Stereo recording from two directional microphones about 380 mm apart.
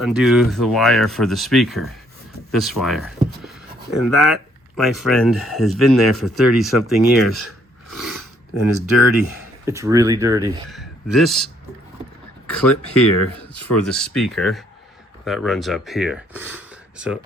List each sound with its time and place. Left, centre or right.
0.0 s speech: centre
7.9 s a sound: centre
8.6 s speech: left
9.6 s speech: centre
12.5 s speech: centre